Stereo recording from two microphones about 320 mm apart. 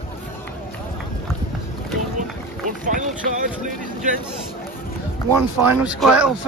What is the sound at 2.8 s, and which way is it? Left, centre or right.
Speech, right.